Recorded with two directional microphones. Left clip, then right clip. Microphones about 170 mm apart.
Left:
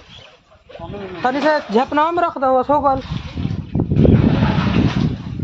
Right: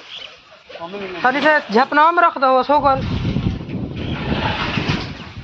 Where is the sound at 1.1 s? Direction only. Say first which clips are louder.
Right 2 dB; 20° left (ahead or behind).